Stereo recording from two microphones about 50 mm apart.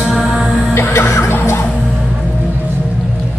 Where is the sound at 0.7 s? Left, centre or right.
Left.